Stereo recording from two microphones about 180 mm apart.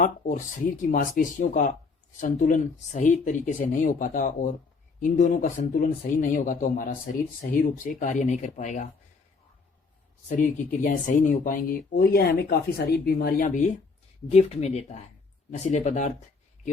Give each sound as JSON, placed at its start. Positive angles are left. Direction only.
{"t": 0.0, "sound": "speech", "side_deg": 45}
{"t": 10.2, "sound": "speech", "side_deg": 45}